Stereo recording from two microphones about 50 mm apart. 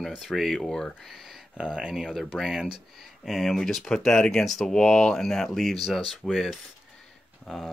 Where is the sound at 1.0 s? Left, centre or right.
Centre.